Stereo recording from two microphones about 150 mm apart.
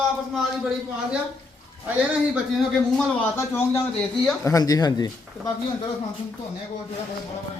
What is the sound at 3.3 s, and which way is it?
A man's voice, 15° left (ahead or behind).